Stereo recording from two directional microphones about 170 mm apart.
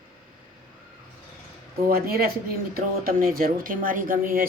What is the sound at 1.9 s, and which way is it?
Speech, 65° right (ahead or behind).